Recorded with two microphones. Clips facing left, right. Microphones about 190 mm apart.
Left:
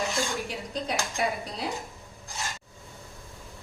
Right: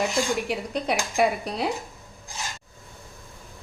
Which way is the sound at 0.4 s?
65° right (ahead or behind).